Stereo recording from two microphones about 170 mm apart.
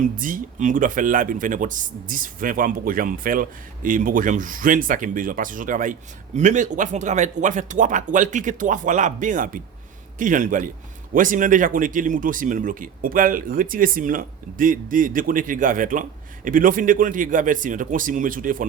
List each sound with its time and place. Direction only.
0.0 s speech: 50° right (ahead or behind)